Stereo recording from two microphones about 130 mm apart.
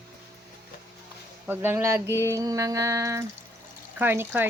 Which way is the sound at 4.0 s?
15° right (ahead or behind).